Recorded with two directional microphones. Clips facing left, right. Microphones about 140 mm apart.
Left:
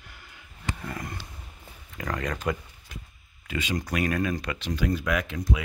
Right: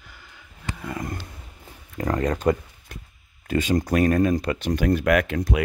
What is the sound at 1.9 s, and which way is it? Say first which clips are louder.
Speech: right 7 dB; 30° right (ahead or behind).